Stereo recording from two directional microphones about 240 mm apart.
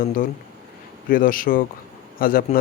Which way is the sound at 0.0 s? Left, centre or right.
Left.